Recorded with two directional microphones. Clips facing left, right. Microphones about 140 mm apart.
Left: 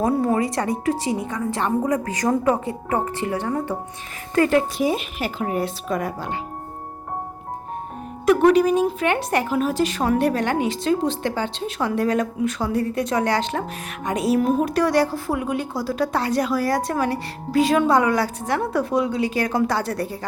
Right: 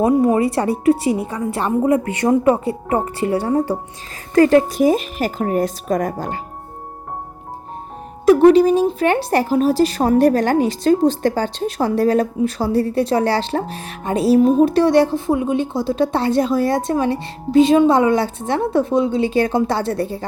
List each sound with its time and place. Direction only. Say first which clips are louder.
0.0 s a woman's voice: right 5 dB; 20° right (ahead or behind); by 6.4 s 45° right (ahead or behind)
8.4 s a woman's voice: right 4 dB; 30° right (ahead or behind)